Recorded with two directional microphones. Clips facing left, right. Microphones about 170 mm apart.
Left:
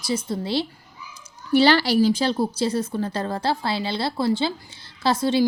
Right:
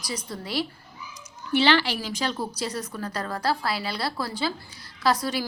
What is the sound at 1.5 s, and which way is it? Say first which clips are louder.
A woman's voice: left 5 dB; 40° left (ahead or behind).